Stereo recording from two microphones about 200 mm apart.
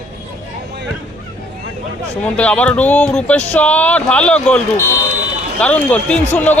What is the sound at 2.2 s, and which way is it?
Speech, 5° left (ahead or behind).